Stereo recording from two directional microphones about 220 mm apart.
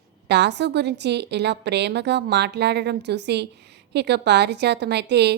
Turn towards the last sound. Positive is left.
turn(degrees=-50)  # may be behind; listen again after turning